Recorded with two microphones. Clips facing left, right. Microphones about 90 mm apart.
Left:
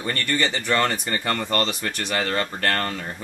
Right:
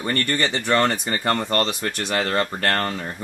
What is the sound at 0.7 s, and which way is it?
Speech, 35° right (ahead or behind).